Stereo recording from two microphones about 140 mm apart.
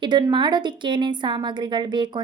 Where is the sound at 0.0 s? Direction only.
35° right (ahead or behind).